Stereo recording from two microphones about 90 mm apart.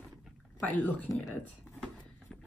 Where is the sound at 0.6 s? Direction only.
20° left (ahead or behind).